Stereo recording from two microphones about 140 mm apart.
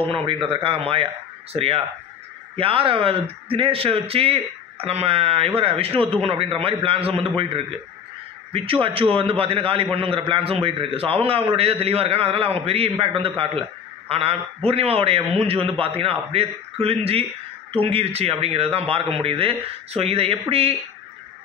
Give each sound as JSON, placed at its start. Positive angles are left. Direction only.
{"t": 0.0, "sound": "a man's voice", "side_deg": -40}